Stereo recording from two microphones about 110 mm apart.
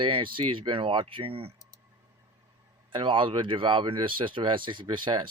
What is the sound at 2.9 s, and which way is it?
Speech, 45° right (ahead or behind).